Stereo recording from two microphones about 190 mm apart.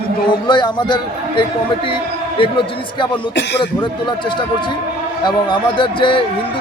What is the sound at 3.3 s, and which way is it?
Speech, 65° left (ahead or behind).